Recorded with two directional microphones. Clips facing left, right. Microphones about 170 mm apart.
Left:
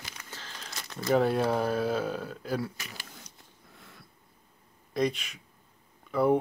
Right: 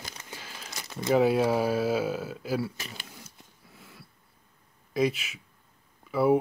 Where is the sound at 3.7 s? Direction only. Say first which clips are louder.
Right 3 dB; 5° right (ahead or behind).